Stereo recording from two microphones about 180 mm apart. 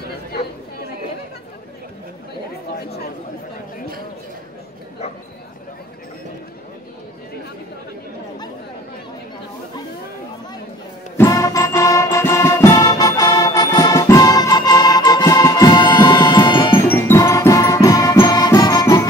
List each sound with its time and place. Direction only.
11.1 s music: 20° left (ahead or behind)
16.7 s music: 10° left (ahead or behind)